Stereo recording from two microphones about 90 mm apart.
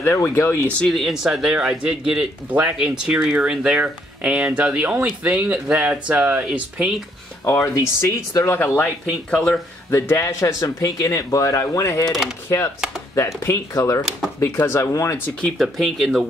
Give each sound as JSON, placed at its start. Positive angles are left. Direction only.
{"t": 0.0, "sound": "speech", "side_deg": 25}
{"t": 0.8, "sound": "speech", "side_deg": 0}
{"t": 7.4, "sound": "speech", "side_deg": 30}
{"t": 8.5, "sound": "speech", "side_deg": 20}
{"t": 9.3, "sound": "speech", "side_deg": 5}
{"t": 9.8, "sound": "speech", "side_deg": 30}
{"t": 12.1, "sound": "speech", "side_deg": -5}
{"t": 12.4, "sound": "speech", "side_deg": 30}
{"t": 15.5, "sound": "speech", "side_deg": 0}